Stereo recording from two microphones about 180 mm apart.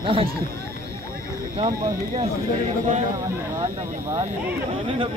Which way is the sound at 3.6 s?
20° right (ahead or behind).